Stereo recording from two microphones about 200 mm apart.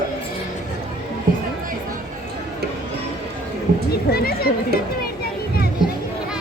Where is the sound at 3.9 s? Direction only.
50° left (ahead or behind).